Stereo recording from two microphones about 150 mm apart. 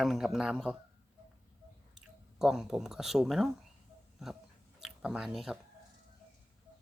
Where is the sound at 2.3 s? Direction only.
Centre (ahead or behind).